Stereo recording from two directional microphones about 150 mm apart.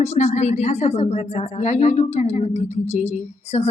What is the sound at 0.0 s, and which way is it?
A woman's voice, 45° left (ahead or behind).